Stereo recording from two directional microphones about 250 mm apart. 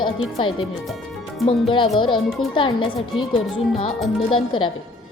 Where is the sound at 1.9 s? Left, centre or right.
Centre.